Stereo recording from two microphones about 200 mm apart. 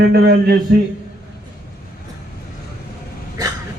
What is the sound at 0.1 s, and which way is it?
Speech, 55° right (ahead or behind).